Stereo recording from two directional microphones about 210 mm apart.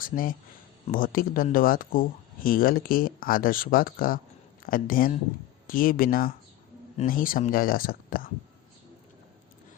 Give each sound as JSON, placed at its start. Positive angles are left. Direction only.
{"t": 0.0, "sound": "speech", "side_deg": 40}